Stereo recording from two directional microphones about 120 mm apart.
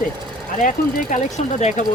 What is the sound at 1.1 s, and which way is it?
Speech, 85° left.